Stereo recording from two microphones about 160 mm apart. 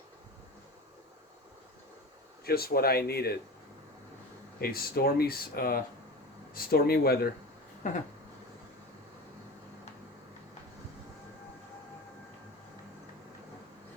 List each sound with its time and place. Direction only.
2.4 s speech: 70° left (ahead or behind)
4.6 s speech: 70° left (ahead or behind)